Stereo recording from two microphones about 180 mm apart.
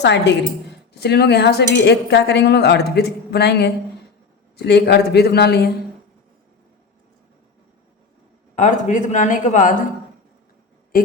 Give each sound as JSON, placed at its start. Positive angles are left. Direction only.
{"t": 0.0, "sound": "speech", "side_deg": 75}
{"t": 0.9, "sound": "a man's voice", "side_deg": 65}
{"t": 8.5, "sound": "speech", "side_deg": 45}